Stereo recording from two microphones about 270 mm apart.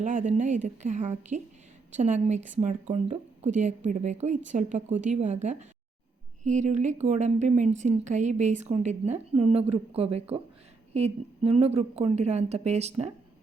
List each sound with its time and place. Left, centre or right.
0.0 s speech: right